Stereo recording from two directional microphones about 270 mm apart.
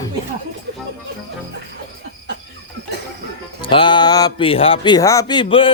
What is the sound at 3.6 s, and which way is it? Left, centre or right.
Speech, centre.